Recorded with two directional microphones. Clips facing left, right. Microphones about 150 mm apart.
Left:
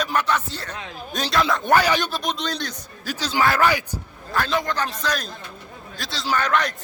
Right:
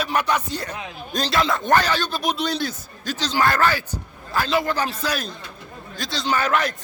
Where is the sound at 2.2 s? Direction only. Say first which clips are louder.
Right 3 dB; 10° right (ahead or behind).